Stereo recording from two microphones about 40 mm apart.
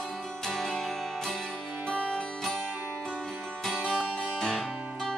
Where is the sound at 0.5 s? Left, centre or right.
Centre.